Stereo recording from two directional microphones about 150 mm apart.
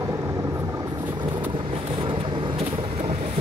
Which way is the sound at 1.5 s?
35° right (ahead or behind).